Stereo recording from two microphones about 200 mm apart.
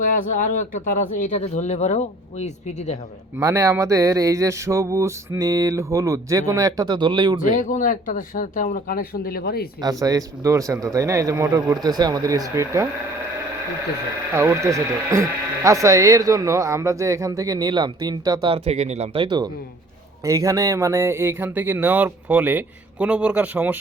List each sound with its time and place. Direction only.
0.0 s speech: 40° left (ahead or behind)
3.3 s speech: 15° right (ahead or behind)
7.4 s speech: 40° left (ahead or behind)
9.8 s speech: 15° right (ahead or behind)
14.3 s speech: 15° right (ahead or behind)